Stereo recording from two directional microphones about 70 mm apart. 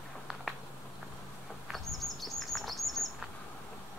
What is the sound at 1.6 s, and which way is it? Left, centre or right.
Chirp, centre.